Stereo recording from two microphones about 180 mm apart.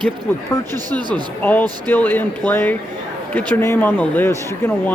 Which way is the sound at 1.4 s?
10° left (ahead or behind).